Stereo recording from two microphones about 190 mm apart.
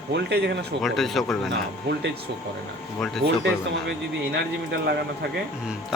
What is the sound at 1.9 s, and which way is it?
Speech, 65° right (ahead or behind).